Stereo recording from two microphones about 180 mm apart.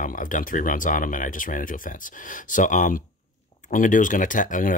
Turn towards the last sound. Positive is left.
turn(degrees=45)  # may be behind; listen again after turning